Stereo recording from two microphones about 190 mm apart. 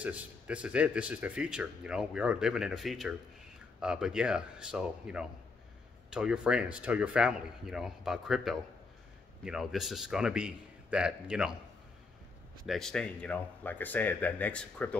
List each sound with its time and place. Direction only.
0.0 s speech: 5° right (ahead or behind)
12.6 s speech: centre (ahead or behind)